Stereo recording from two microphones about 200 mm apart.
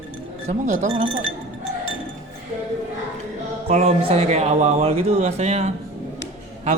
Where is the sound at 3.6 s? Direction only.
30° right (ahead or behind).